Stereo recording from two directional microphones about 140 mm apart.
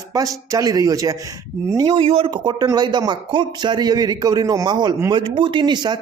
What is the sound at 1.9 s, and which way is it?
Speech, 40° right (ahead or behind).